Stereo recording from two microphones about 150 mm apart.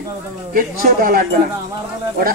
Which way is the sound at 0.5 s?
75° right (ahead or behind).